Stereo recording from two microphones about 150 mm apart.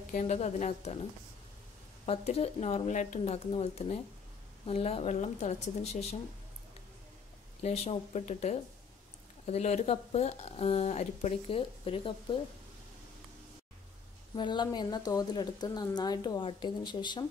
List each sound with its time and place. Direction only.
0.1 s speech: 50° left (ahead or behind)
2.0 s speech: 40° left (ahead or behind)
7.6 s speech: 45° left (ahead or behind)
14.3 s speech: 30° left (ahead or behind)